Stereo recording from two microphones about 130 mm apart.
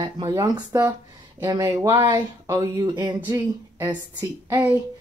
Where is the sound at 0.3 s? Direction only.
25° right (ahead or behind).